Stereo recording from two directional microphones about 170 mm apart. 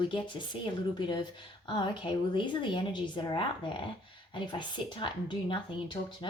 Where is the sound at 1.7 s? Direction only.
25° left (ahead or behind).